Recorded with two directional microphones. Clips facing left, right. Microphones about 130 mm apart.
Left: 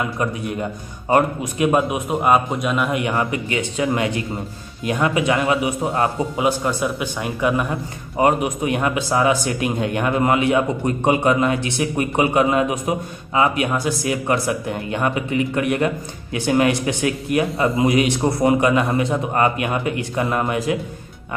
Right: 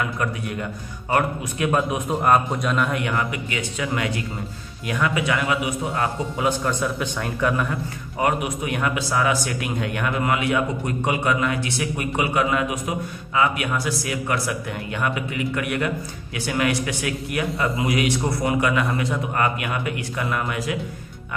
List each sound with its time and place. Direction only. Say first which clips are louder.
0.0 s a man's voice: left 3 dB; 25° left (ahead or behind)
1.9 s speech: left 2 dB; 10° left (ahead or behind)
2.9 s a man's voice: left 4 dB; 25° left (ahead or behind)
6.3 s speech: left 3 dB; 15° left (ahead or behind)
8.2 s a man's voice: left 5 dB; 25° left (ahead or behind)